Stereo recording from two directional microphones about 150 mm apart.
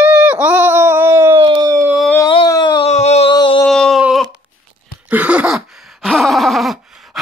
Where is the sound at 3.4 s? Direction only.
30° left (ahead or behind).